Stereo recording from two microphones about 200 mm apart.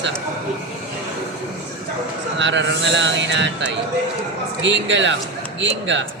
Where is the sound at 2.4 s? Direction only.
65° right (ahead or behind).